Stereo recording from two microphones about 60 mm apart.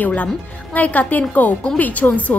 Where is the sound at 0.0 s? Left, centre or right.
Left.